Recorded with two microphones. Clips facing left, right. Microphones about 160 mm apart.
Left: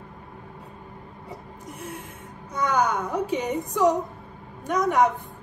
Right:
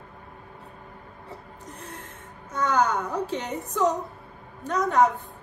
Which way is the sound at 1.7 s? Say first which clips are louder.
Left 5 dB; 10° left (ahead or behind).